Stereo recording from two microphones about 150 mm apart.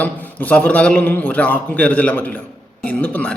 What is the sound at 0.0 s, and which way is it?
A man's voice, 10° left (ahead or behind).